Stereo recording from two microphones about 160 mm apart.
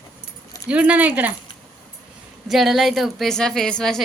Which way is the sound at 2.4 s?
Centre (ahead or behind).